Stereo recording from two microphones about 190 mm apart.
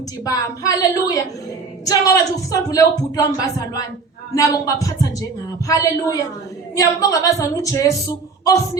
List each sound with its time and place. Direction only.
0.3 s a woman's voice: 20° left (ahead or behind)